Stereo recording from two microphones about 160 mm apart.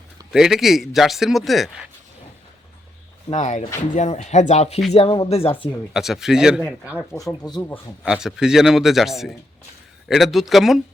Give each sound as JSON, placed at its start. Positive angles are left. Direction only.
{"t": 0.3, "sound": "a man's voice", "side_deg": -5}
{"t": 3.2, "sound": "speech", "side_deg": 50}
{"t": 5.9, "sound": "a man's voice", "side_deg": 0}
{"t": 6.8, "sound": "speech", "side_deg": 15}
{"t": 8.0, "sound": "a man's voice", "side_deg": -5}